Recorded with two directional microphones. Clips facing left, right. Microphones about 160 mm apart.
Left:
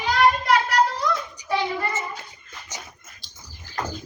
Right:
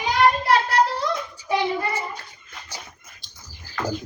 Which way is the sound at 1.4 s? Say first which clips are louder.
Right 1 dB; 15° left (ahead or behind).